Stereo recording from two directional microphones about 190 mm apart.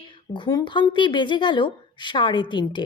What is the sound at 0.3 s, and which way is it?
A woman's voice, 25° left (ahead or behind).